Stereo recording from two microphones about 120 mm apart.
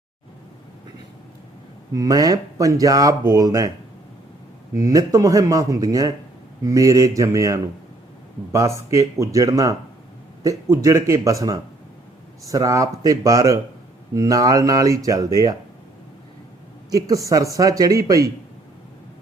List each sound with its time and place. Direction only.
1.9 s speech: 30° right (ahead or behind)
4.7 s speech: 30° right (ahead or behind)
16.9 s speech: 30° right (ahead or behind)